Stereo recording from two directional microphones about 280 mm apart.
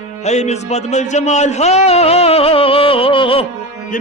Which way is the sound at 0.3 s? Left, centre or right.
Left.